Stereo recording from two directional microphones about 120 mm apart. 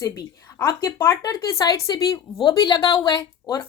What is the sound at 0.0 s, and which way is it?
A woman's voice, 30° left (ahead or behind).